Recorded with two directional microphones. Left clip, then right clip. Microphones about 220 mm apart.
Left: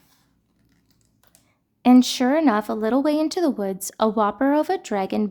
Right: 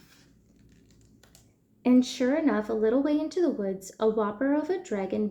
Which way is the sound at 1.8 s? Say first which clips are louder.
Left 7 dB; 40° left (ahead or behind).